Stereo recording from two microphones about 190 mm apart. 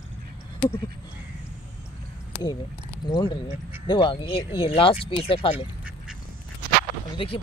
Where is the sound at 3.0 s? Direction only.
25° left (ahead or behind).